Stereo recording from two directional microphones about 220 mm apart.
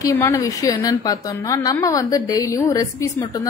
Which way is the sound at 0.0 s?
10° left (ahead or behind).